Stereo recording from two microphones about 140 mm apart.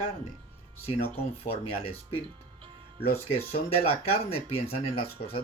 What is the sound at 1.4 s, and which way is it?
Speech, 45° left (ahead or behind).